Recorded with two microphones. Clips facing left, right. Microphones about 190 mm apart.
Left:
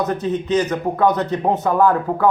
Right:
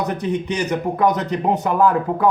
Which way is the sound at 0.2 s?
15° right (ahead or behind).